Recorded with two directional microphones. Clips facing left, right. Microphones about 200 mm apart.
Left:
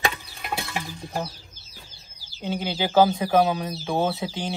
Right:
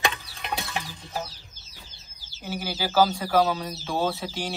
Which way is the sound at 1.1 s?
55° left (ahead or behind).